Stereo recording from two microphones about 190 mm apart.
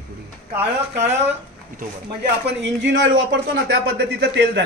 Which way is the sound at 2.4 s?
75° right (ahead or behind).